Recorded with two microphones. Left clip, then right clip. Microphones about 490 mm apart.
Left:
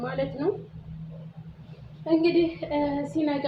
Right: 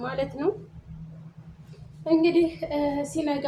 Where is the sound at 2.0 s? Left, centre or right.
Right.